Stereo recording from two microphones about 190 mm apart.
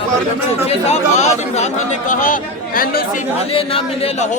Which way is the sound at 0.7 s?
35° left (ahead or behind).